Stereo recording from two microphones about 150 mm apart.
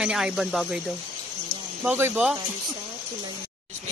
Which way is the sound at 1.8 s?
15° right (ahead or behind).